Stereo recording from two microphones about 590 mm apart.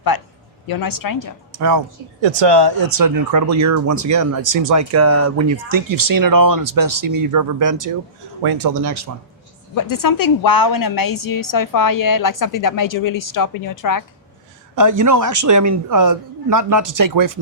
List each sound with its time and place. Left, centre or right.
0.1 s a man's voice: left
1.5 s speech: right
2.2 s speech: right
9.7 s a woman's voice: left
14.8 s speech: right